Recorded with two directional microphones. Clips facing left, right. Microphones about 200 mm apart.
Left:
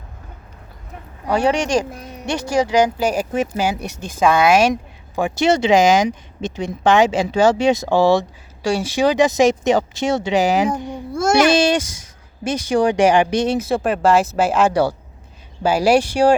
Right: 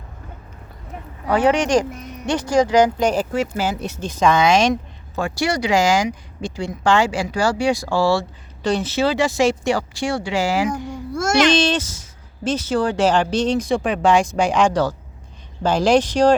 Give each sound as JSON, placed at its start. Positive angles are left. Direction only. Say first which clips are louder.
{"t": 1.3, "sound": "speech", "louder": "right 1 dB", "side_deg": 10}
{"t": 1.8, "sound": "speech", "louder": "right 1 dB", "side_deg": 30}
{"t": 2.3, "sound": "speech", "louder": "right 1 dB", "side_deg": 10}
{"t": 11.3, "sound": "speech", "louder": "left 1 dB", "side_deg": 10}